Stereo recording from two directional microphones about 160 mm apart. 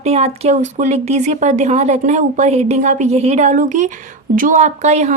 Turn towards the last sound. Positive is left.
turn(degrees=-45)  # may be behind; listen again after turning